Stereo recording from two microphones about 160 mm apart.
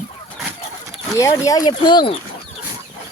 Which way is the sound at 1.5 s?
25° left (ahead or behind).